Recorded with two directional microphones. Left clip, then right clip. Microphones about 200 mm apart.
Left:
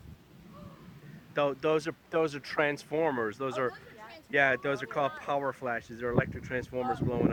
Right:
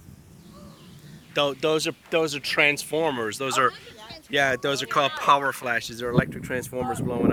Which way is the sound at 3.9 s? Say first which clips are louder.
Right 6 dB; 25° left (ahead or behind).